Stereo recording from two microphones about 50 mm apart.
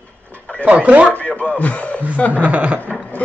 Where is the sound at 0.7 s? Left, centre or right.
Right.